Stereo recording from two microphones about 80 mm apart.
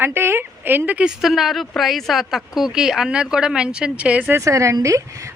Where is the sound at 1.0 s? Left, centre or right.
Centre.